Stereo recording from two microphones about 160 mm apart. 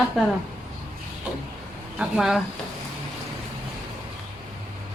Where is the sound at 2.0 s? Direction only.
5° right (ahead or behind).